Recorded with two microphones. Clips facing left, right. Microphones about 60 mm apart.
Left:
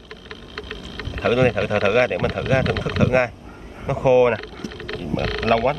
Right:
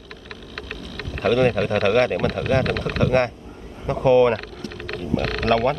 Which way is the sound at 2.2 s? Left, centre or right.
Centre.